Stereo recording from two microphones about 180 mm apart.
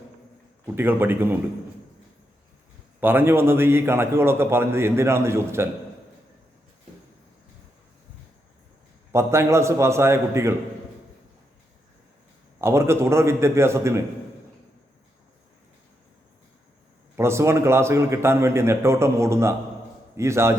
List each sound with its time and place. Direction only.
0.6 s a man's voice: 10° right (ahead or behind)
3.0 s a man's voice: 10° right (ahead or behind)
9.1 s a man's voice: 15° right (ahead or behind)
12.5 s a man's voice: 15° right (ahead or behind)
17.2 s a man's voice: 15° right (ahead or behind)